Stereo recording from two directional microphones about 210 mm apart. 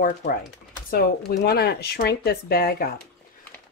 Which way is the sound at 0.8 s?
45° left (ahead or behind).